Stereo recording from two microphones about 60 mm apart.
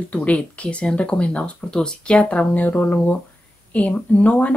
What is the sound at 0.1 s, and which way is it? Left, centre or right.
Speech, left.